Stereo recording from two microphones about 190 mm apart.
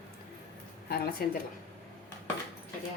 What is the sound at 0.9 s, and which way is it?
Speech, 55° left (ahead or behind).